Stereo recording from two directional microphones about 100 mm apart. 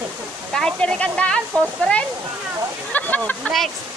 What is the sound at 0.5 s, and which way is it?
Speech, 5° left (ahead or behind).